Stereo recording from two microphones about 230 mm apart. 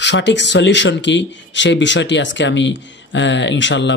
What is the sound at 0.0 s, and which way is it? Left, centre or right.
A man's voice, left.